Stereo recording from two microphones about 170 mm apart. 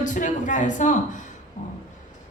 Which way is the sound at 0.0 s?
50° left (ahead or behind).